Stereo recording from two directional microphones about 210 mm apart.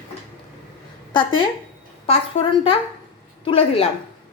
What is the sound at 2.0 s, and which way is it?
A woman's voice, 25° left (ahead or behind).